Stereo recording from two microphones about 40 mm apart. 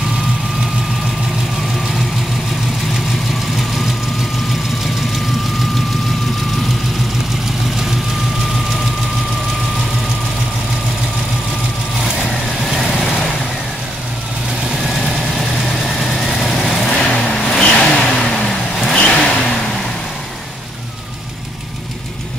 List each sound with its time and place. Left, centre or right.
12.2 s vehicle: centre
14.8 s vehicle: centre